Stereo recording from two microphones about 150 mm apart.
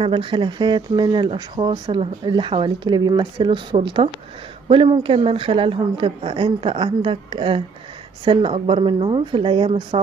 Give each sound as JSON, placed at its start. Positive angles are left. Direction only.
{"t": 0.0, "sound": "speech", "side_deg": -35}